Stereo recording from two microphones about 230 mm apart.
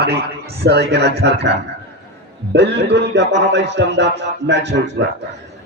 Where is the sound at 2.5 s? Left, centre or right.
Right.